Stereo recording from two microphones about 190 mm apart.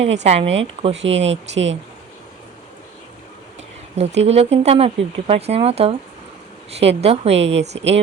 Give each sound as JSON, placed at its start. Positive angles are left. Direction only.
{"t": 0.0, "sound": "speech", "side_deg": -35}
{"t": 0.9, "sound": "speech", "side_deg": -75}
{"t": 3.9, "sound": "speech", "side_deg": -35}